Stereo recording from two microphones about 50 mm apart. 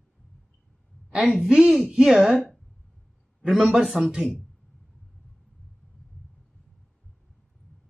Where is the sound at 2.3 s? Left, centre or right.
Centre.